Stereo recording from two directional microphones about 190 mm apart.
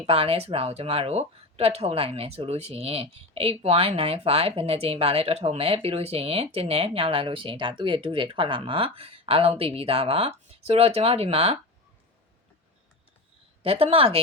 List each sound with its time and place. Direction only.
0.0 s speech: 30° right (ahead or behind)
13.6 s speech: 30° right (ahead or behind)